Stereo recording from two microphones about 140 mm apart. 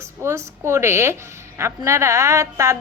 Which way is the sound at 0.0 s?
20° right (ahead or behind).